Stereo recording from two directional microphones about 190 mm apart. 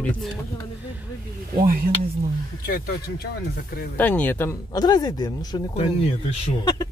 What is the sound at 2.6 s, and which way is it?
Speech, 55° left (ahead or behind).